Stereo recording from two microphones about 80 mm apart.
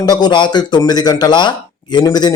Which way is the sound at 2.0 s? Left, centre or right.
Left.